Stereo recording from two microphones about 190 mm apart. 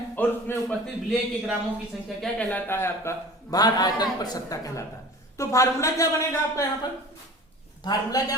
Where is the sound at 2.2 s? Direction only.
5° left (ahead or behind).